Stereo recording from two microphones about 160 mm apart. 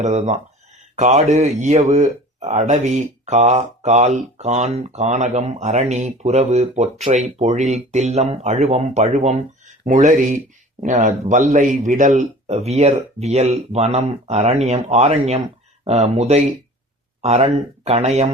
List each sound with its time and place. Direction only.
0.0 s speech: 45° right (ahead or behind)